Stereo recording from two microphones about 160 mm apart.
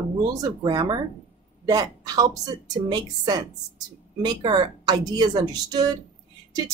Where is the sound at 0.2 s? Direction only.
20° right (ahead or behind).